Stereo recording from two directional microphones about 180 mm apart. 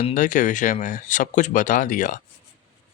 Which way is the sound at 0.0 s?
45° left (ahead or behind).